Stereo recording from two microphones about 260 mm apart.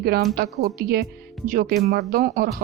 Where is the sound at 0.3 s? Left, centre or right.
Right.